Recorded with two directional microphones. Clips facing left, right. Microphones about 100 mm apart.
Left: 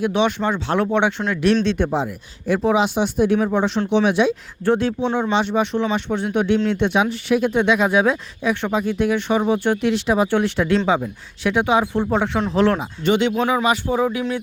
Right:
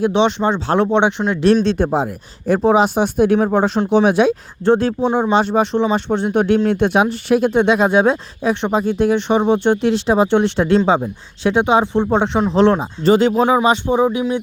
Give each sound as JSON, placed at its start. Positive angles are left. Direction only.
{"t": 0.0, "sound": "speech", "side_deg": -25}
{"t": 12.8, "sound": "speech", "side_deg": -35}